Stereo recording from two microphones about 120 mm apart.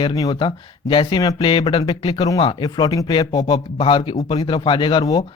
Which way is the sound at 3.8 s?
45° left (ahead or behind).